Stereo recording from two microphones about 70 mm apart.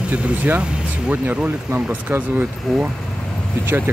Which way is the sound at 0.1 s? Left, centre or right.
Right.